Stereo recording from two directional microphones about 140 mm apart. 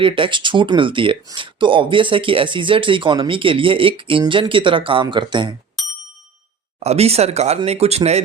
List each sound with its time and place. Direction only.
0.0 s speech: 35° right (ahead or behind)
6.7 s speech: 50° right (ahead or behind)